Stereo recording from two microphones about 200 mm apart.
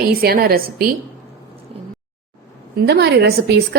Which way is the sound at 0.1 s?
50° right (ahead or behind).